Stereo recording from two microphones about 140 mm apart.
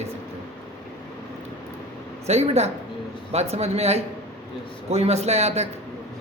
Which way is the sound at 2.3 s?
50° right (ahead or behind).